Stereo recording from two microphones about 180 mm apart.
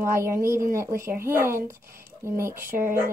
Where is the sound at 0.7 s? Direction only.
15° right (ahead or behind).